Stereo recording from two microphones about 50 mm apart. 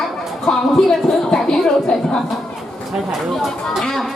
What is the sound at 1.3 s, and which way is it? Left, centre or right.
Speech, centre.